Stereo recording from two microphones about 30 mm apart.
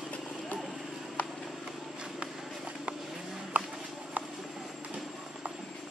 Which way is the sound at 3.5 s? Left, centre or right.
Right.